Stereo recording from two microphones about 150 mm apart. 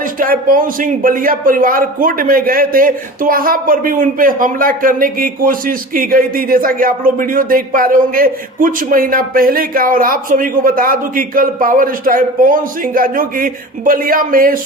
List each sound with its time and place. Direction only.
0.0 s a man's voice: 70° right (ahead or behind)